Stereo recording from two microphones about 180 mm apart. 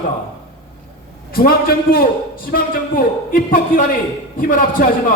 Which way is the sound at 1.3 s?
55° left (ahead or behind).